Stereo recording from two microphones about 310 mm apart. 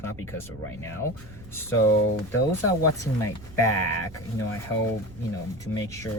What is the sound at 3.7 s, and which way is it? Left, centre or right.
Speech, left.